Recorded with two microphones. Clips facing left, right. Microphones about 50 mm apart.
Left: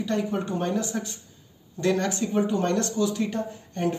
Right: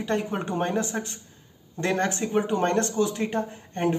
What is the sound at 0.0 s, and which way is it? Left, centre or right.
A woman's voice, right.